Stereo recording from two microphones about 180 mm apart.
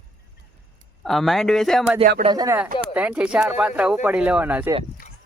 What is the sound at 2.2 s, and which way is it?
Speech, 20° right (ahead or behind).